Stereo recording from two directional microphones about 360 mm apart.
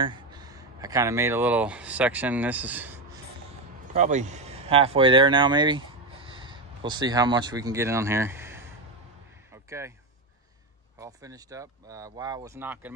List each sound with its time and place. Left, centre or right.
0.0 s speech: centre
3.9 s speech: centre
9.7 s speech: centre
11.0 s speech: centre